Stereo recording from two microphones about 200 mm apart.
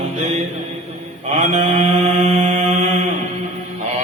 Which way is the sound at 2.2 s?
30° right (ahead or behind).